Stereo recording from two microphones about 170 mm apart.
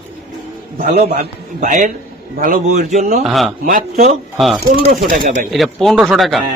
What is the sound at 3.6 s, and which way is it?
Speech, 55° right (ahead or behind).